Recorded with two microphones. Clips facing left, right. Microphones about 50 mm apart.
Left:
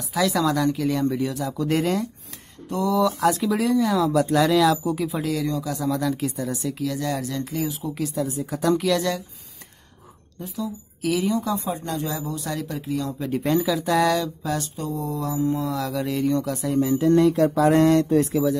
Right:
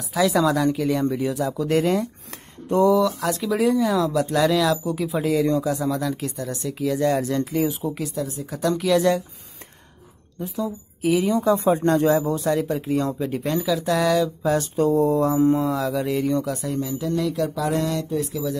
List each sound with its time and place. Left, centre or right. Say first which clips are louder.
0.1 s speech: right 2 dB; centre
7.0 s speech: right 6 dB; right
7.9 s speech: left 2 dB; centre
10.4 s speech: right 3 dB; right
11.1 s a woman's voice: right 3 dB; centre
11.3 s speech: right 6 dB; right
13.2 s speech: left 2 dB; centre
14.4 s speech: right 7 dB; right
15.7 s speech: right 3 dB; centre
16.8 s mantra: left 9 dB; left